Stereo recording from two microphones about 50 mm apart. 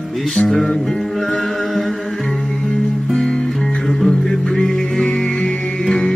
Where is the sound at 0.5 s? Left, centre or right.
Centre.